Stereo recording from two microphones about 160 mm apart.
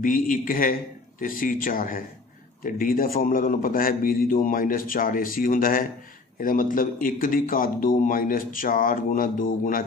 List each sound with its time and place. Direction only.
0.0 s speech: 60° left (ahead or behind)